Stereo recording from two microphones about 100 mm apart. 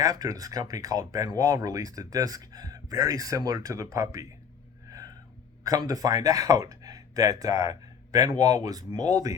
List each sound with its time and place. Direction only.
0.0 s speech: 35° right (ahead or behind)
4.9 s a sound: 35° right (ahead or behind)
5.6 s speech: 35° right (ahead or behind)